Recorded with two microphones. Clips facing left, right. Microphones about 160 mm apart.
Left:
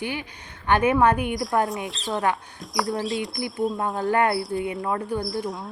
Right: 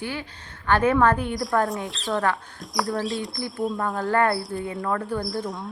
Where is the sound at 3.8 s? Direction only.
20° left (ahead or behind).